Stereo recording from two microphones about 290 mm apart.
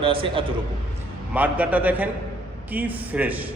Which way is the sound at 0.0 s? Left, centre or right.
Centre.